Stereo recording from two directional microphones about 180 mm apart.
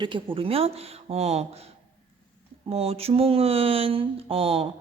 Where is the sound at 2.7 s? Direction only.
35° right (ahead or behind).